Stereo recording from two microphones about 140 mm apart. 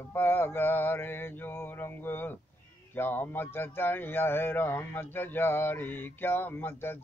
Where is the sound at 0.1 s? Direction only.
15° left (ahead or behind).